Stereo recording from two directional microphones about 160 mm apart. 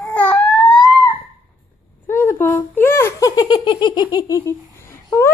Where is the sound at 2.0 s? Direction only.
15° left (ahead or behind).